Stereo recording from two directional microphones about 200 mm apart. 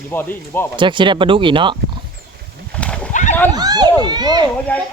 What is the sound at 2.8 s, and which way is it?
Wild animals, 5° left (ahead or behind).